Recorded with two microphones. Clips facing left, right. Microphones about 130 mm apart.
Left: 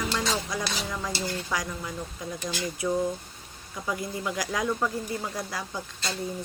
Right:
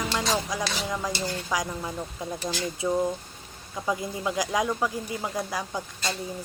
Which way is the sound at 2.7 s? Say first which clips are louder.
Right 1 dB; 25° right (ahead or behind).